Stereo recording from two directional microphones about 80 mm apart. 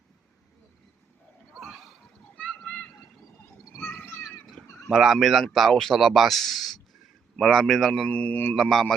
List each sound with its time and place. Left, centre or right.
1.5 s horse: centre
2.3 s splash: centre
3.8 s a sound: left
4.9 s speech: centre
8.0 s speech: centre
8.6 s speech: centre